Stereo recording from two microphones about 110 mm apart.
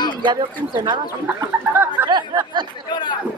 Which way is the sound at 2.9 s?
45° left (ahead or behind).